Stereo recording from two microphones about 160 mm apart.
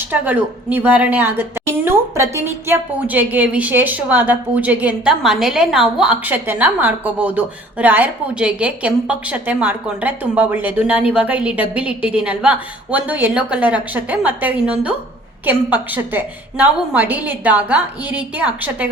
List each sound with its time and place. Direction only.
0.1 s a woman's voice: 10° right (ahead or behind)